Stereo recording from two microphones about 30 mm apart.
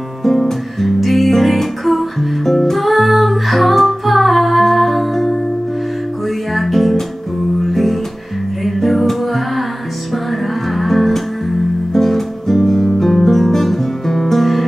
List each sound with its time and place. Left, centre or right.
0.2 s music: centre
6.5 s music: centre
10.8 s music: centre
11.9 s guitar: centre